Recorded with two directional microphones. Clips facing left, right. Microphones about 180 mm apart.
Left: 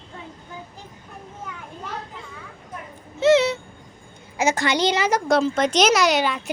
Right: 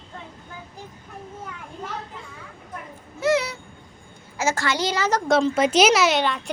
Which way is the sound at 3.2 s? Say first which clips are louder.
Left 5 dB; 25° left (ahead or behind).